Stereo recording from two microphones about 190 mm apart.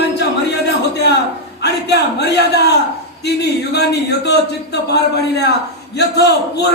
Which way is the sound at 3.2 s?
60° left (ahead or behind).